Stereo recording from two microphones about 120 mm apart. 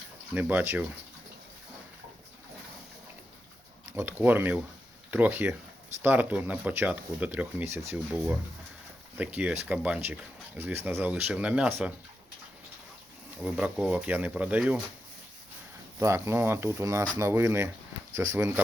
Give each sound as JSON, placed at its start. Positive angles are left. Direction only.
{"t": 0.3, "sound": "speech", "side_deg": -15}
{"t": 3.9, "sound": "speech", "side_deg": -15}
{"t": 9.1, "sound": "speech", "side_deg": -10}
{"t": 13.4, "sound": "speech", "side_deg": -5}
{"t": 16.0, "sound": "speech", "side_deg": -25}